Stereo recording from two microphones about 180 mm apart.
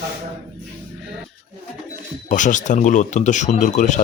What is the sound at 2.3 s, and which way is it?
A man's voice, 45° left (ahead or behind).